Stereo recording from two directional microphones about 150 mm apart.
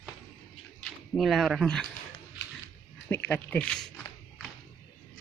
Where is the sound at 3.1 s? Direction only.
15° left (ahead or behind).